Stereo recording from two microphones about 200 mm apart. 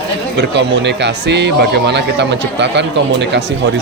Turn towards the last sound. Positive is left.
turn(degrees=-60)  # may be behind; listen again after turning